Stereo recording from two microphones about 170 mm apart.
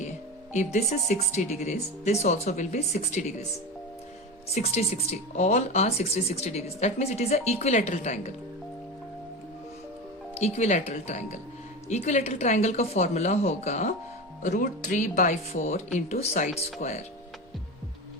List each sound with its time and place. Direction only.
0.5 s speech: 45° left (ahead or behind)
4.5 s speech: 40° left (ahead or behind)
10.3 s speech: 40° left (ahead or behind)